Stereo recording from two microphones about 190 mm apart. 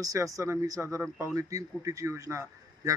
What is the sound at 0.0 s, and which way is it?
Speech, 15° right (ahead or behind).